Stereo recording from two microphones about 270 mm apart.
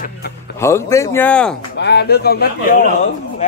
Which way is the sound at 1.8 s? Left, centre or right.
Left.